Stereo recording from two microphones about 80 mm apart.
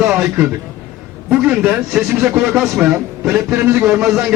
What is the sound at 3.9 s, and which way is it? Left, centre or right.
Speech, centre.